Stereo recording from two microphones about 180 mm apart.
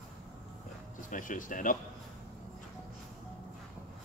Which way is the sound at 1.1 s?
45° left (ahead or behind).